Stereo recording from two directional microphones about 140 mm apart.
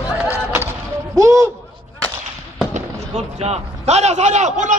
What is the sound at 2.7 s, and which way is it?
Speech, 55° right (ahead or behind).